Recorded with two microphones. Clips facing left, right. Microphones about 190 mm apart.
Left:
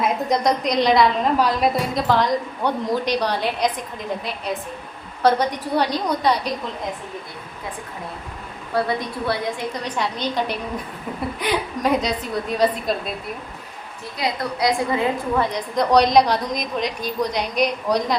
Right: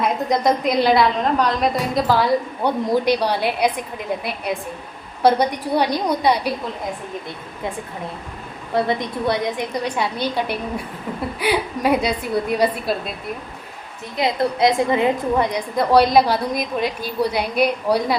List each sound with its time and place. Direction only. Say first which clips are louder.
0.0 s a woman's voice: right 1 dB; centre (ahead or behind)
8.7 s a woman's voice: right 2 dB; 20° right (ahead or behind)
14.2 s a woman's voice: right 5 dB; 25° right (ahead or behind)
15.7 s a woman's voice: right 1 dB; 5° right (ahead or behind)